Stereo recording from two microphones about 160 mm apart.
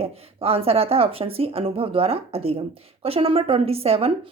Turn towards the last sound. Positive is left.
turn(degrees=-40)  # may be behind; listen again after turning